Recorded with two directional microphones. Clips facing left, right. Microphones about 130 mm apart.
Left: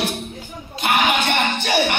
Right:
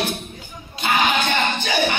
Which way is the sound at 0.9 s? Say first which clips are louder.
Left 1 dB; 70° left (ahead or behind).